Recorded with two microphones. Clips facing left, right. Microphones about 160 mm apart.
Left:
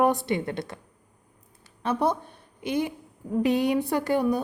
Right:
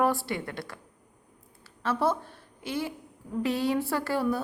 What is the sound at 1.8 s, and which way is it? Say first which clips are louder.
A woman's voice: left 2 dB; 15° left (ahead or behind).